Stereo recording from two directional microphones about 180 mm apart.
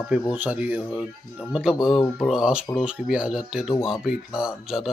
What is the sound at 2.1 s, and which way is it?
Speech, centre (ahead or behind).